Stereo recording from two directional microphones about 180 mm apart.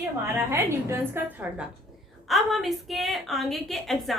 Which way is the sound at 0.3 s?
15° right (ahead or behind).